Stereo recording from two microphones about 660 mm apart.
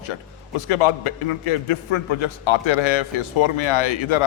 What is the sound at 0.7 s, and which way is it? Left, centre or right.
A man's voice, left.